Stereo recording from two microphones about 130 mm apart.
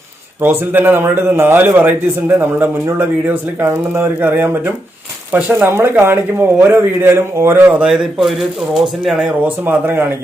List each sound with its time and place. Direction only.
0.4 s a man's voice: 15° right (ahead or behind)
9.6 s a man's voice: 15° right (ahead or behind)